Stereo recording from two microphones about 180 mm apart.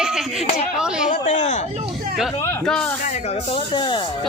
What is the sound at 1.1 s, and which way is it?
Speech, 45° left (ahead or behind).